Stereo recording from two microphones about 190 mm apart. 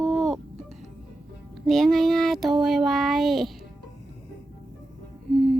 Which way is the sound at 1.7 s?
Centre (ahead or behind).